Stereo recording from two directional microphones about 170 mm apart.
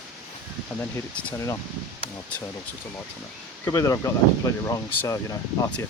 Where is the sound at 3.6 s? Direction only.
20° left (ahead or behind).